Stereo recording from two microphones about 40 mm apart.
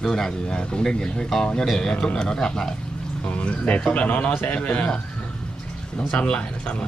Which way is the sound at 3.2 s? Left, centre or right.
Left.